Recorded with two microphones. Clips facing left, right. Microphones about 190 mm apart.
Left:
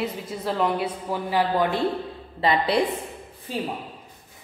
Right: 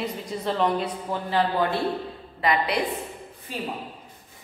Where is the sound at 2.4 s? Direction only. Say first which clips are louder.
Left 3 dB; 30° left (ahead or behind).